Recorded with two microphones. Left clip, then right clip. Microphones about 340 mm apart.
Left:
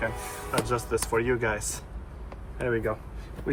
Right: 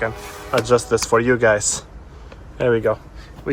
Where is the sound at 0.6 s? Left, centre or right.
Centre.